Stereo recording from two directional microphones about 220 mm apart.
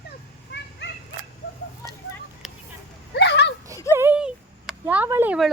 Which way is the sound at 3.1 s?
50° left (ahead or behind).